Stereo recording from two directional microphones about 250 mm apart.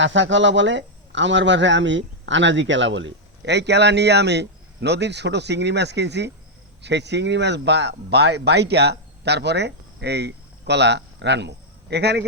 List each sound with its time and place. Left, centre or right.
0.0 s a man's voice: right